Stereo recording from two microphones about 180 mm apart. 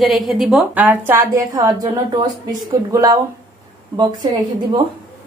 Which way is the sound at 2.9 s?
20° right (ahead or behind).